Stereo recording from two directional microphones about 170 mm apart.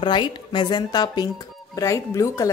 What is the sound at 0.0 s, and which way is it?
Speech, 30° left (ahead or behind).